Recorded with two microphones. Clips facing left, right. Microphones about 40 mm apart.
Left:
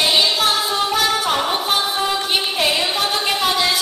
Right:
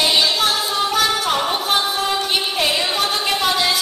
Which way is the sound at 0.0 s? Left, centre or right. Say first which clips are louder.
Even; centre.